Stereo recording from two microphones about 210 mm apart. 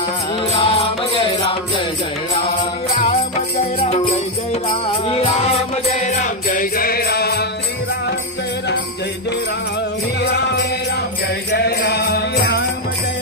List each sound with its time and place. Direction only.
0.5 s music: 25° left (ahead or behind); by 7.4 s 50° left (ahead or behind)
10.2 s music: 50° left (ahead or behind)